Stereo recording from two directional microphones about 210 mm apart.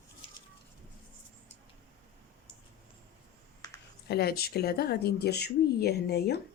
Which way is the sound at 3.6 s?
15° left (ahead or behind).